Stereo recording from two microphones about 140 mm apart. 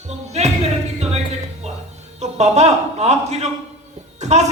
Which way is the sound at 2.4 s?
50° right (ahead or behind).